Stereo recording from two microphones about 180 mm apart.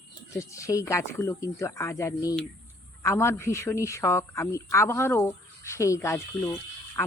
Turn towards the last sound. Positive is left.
turn(degrees=15)  # may be behind; listen again after turning